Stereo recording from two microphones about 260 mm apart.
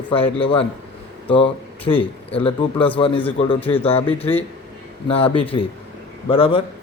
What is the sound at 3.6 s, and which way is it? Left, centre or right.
Speech, centre.